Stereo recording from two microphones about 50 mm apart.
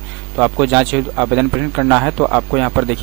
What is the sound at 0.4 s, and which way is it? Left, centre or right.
Speech, centre.